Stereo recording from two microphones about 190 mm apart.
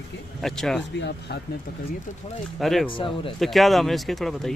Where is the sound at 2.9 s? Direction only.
25° left (ahead or behind).